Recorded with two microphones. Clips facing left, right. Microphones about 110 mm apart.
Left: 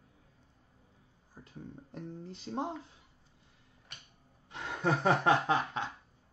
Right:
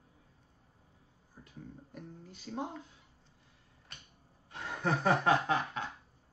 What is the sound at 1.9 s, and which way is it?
Guitar, 25° left (ahead or behind).